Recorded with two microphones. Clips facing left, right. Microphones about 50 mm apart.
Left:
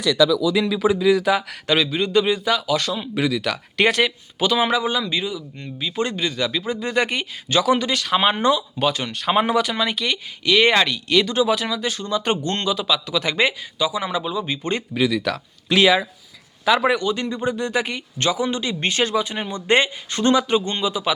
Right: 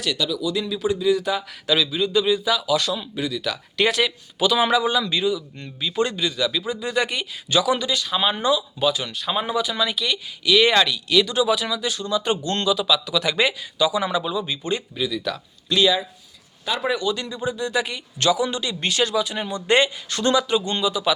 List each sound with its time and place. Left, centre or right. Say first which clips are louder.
0.5 s speech: left 5 dB; left
1.6 s speech: right 1 dB; left
3.2 s speech: left 4 dB; left
4.5 s speech: right 1 dB; left
5.5 s speech: left 1 dB; centre
6.0 s speech: right 1 dB; left
9.7 s speech: left 1 dB; left
12.5 s speech: right 1 dB; left
14.3 s speech: left 1 dB; left
14.6 s speech: left 1 dB; left
14.9 s speech: left 5 dB; left
16.9 s speech: left 3 dB; left
17.4 s speech: even; left